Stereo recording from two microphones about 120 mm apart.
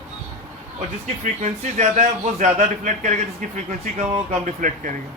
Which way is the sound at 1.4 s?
80° right.